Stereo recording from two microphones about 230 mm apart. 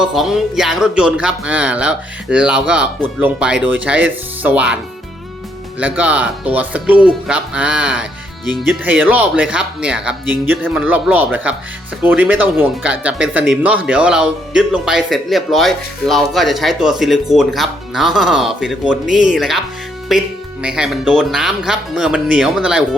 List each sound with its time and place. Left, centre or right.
0.0 s speech: centre
5.8 s speech: centre